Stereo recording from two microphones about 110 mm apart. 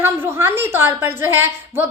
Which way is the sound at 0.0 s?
20° right (ahead or behind).